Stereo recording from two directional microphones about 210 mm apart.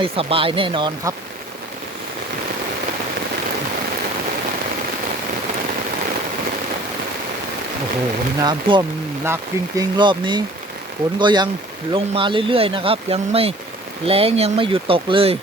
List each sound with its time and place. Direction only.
0.0 s speech: 25° right (ahead or behind)
8.4 s speech: 20° right (ahead or behind)
10.0 s speech: 20° right (ahead or behind)